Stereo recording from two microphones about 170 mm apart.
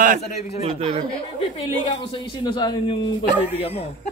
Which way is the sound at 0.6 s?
35° right (ahead or behind).